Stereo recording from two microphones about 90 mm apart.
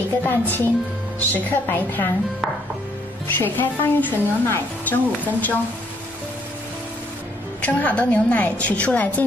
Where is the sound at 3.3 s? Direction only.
25° left (ahead or behind).